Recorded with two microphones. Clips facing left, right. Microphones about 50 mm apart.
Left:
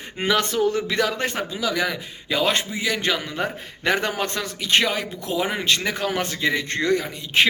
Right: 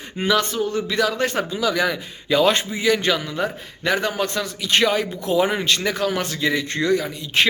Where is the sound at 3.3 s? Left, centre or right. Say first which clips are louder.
Right 2 dB; left.